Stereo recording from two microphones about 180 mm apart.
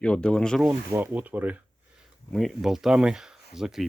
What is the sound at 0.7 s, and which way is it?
Speech, 10° right (ahead or behind).